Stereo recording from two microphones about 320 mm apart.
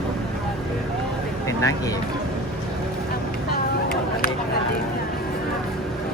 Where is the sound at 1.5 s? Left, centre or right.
Centre.